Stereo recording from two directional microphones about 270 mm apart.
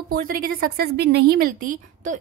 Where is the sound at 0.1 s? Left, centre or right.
Right.